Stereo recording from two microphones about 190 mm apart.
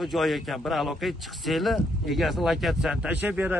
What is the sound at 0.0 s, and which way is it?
A man's voice, centre (ahead or behind).